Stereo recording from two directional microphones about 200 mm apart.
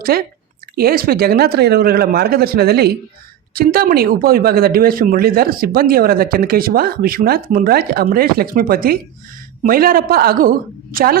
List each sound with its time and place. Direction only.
0.0 s speech: 45° right (ahead or behind)